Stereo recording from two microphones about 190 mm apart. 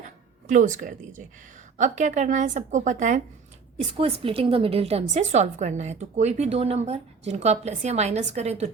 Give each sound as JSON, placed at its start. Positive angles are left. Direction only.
{"t": 0.4, "sound": "a woman's voice", "side_deg": -45}
{"t": 3.8, "sound": "a woman's voice", "side_deg": -30}